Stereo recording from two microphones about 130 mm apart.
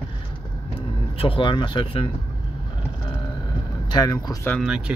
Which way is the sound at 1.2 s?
40° left (ahead or behind).